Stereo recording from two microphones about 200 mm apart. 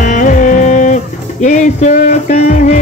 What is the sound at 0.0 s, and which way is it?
Music, 40° left (ahead or behind).